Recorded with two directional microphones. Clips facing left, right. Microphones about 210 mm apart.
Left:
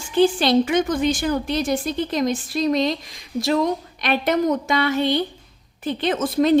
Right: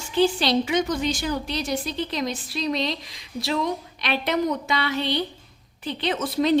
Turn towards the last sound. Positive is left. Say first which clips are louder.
# left 4 dB
turn(degrees=50)  # may be behind; listen again after turning